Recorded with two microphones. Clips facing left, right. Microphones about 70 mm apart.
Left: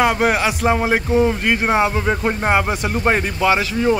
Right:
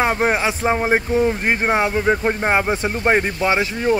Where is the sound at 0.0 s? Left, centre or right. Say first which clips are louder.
Left 2 dB; right.